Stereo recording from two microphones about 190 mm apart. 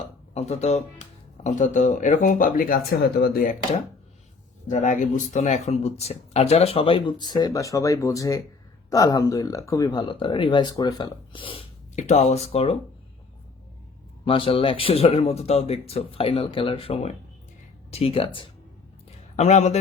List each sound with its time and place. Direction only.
0.3 s speech: 35° left (ahead or behind); by 3.5 s 50° left (ahead or behind)
4.7 s speech: 40° left (ahead or behind)
14.3 s speech: 30° left (ahead or behind)